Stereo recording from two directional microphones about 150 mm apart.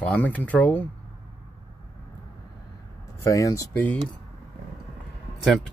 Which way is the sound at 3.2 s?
20° left (ahead or behind).